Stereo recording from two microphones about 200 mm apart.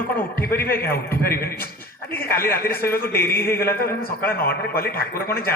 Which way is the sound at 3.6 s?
50° left (ahead or behind).